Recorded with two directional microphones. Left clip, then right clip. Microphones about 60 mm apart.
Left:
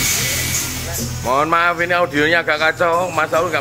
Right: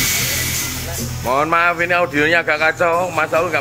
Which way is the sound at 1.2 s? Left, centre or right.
Centre.